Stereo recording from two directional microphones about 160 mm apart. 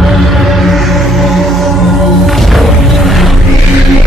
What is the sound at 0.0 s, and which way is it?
Music, centre (ahead or behind).